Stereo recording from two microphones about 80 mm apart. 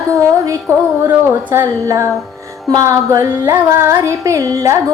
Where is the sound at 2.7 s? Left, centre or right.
Right.